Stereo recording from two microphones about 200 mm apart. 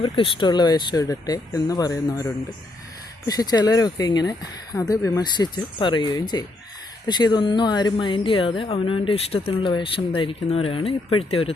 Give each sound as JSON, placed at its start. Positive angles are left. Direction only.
{"t": 0.0, "sound": "speech", "side_deg": 25}